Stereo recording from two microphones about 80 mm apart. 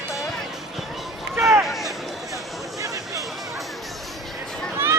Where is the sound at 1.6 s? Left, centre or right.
Centre.